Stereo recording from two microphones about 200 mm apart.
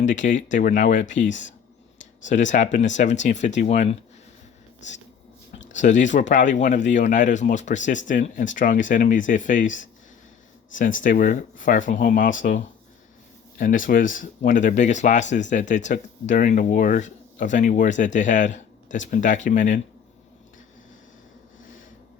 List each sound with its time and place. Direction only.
0.0 s speech: 40° left (ahead or behind)
5.7 s speech: 40° left (ahead or behind)